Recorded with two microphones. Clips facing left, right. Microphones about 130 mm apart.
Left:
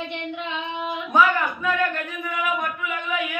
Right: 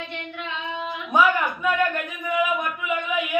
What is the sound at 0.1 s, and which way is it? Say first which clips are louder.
Female singing: left 3 dB; 20° left (ahead or behind).